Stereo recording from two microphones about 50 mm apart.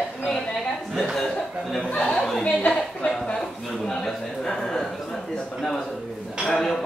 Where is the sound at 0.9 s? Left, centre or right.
Centre.